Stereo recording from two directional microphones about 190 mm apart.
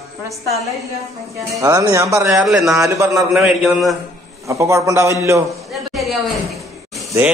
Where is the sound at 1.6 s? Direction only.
20° right (ahead or behind).